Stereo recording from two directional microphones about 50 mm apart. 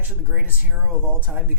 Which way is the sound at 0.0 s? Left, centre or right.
Right.